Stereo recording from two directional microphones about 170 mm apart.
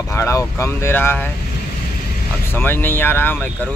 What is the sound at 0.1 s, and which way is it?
Speech, 15° left (ahead or behind).